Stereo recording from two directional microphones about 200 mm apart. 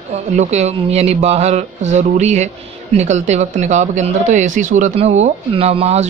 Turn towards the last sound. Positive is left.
turn(degrees=-30)  # may be behind; listen again after turning